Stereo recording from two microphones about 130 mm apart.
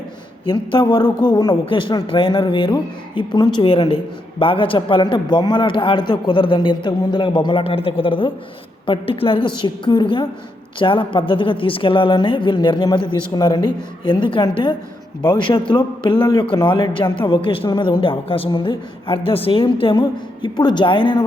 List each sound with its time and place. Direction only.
0.5 s a woman's voice: 40° left (ahead or behind)